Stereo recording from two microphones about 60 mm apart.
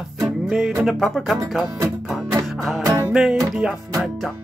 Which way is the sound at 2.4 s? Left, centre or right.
Centre.